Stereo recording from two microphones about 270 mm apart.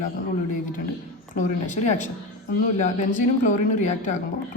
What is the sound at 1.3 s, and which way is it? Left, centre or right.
A woman's voice, left.